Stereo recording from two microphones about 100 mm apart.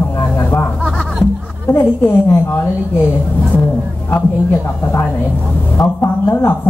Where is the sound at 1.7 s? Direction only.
20° left (ahead or behind).